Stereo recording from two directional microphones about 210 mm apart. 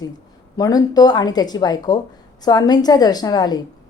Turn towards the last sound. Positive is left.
turn(degrees=20)  # may be behind; listen again after turning